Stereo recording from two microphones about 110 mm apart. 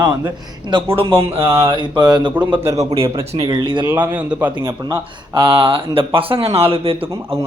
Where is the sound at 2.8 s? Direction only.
75° right (ahead or behind).